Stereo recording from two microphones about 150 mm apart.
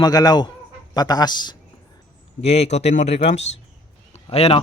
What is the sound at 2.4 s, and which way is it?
Speech, 45° left (ahead or behind).